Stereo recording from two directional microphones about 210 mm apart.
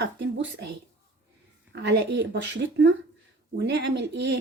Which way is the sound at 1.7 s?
55° right (ahead or behind).